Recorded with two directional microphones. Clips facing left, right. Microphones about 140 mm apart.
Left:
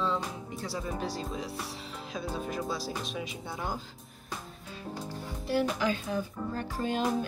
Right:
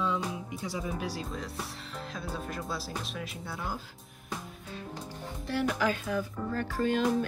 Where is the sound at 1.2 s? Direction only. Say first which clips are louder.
Left 2 dB; centre (ahead or behind).